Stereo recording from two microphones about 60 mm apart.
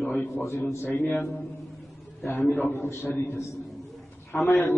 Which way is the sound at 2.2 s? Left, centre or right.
Left.